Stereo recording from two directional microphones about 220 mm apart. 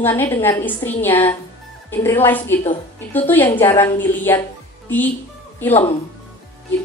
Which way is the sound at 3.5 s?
20° left (ahead or behind).